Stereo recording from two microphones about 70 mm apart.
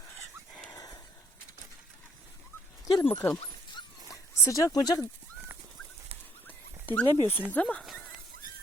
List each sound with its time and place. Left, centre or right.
3.0 s speech: left
3.7 s dog: left
4.4 s speech: left
4.8 s speech: left
6.8 s speech: left
7.8 s dog: centre